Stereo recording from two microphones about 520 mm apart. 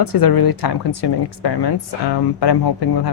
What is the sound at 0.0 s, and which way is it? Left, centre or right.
Speech, left.